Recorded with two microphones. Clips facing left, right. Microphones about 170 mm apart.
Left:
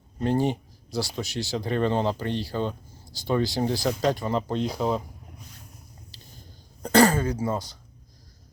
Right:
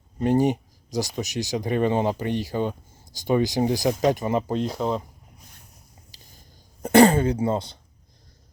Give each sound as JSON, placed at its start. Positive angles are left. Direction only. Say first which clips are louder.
{"t": 0.2, "sound": "speech", "louder": "right 4 dB", "side_deg": -15}
{"t": 4.5, "sound": "speech", "louder": "right 1 dB", "side_deg": 0}
{"t": 6.8, "sound": "speech", "louder": "right 4 dB", "side_deg": -20}